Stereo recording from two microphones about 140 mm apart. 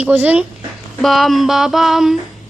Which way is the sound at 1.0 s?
Centre (ahead or behind).